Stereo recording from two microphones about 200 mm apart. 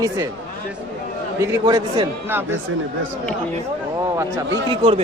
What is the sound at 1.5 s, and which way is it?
Speech, 20° right (ahead or behind).